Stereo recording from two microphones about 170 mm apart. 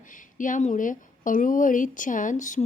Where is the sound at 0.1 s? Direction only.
50° left (ahead or behind).